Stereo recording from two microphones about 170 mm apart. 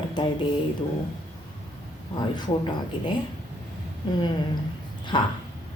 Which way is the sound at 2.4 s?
30° left (ahead or behind).